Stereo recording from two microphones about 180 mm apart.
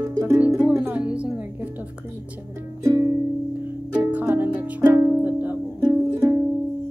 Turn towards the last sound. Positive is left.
turn(degrees=-15)  # may be behind; listen again after turning